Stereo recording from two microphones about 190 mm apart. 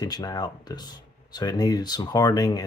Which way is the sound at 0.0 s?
20° left (ahead or behind).